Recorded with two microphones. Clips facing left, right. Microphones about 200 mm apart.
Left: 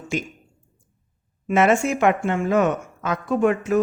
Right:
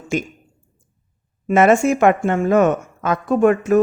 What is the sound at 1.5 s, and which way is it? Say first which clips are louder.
A woman's voice: right 5 dB; 45° right (ahead or behind).